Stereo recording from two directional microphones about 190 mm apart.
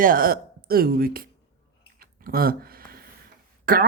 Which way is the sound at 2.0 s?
50° right (ahead or behind).